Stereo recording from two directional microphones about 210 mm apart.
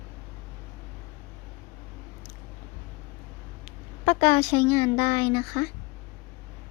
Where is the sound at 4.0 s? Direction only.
20° left (ahead or behind).